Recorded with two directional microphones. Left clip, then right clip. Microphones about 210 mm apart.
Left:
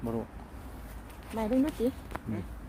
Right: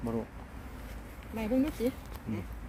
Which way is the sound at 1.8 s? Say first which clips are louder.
Left 2 dB; 25° left (ahead or behind).